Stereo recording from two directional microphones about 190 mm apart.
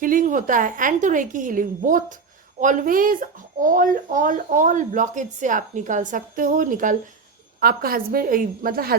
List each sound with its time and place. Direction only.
0.0 s speech: 45° right (ahead or behind)